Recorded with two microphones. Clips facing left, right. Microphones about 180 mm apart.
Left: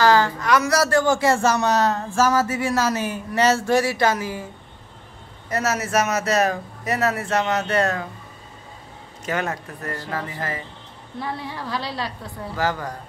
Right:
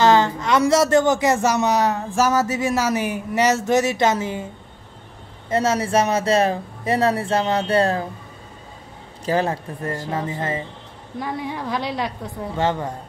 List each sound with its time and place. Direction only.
0.0 s speech: 25° right (ahead or behind)
5.5 s speech: 30° right (ahead or behind)
9.2 s a man's voice: 30° right (ahead or behind)